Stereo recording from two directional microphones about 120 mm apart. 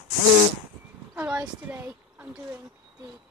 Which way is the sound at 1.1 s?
10° right (ahead or behind).